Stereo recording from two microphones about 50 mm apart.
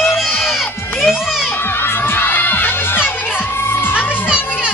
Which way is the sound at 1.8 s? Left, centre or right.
Left.